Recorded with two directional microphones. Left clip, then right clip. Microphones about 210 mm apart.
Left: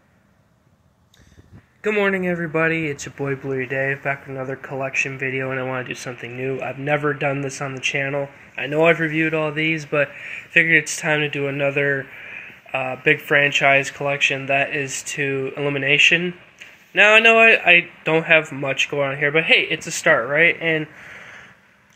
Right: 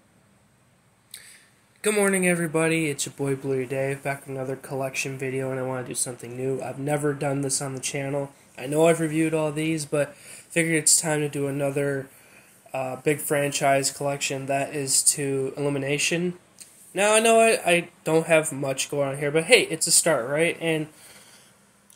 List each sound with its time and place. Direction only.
1.8 s speech: 5° right (ahead or behind)
7.5 s speech: 15° right (ahead or behind)
7.9 s speech: 5° right (ahead or behind)